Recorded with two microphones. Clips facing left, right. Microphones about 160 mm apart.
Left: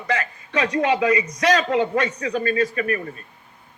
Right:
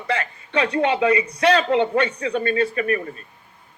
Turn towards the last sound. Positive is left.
turn(degrees=-30)  # may be behind; listen again after turning